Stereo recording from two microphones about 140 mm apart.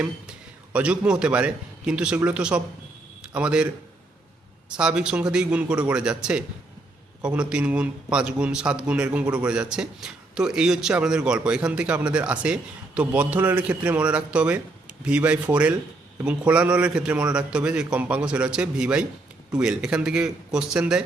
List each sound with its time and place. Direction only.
0.0 s a man's voice: 10° right (ahead or behind)
4.7 s a man's voice: 5° right (ahead or behind)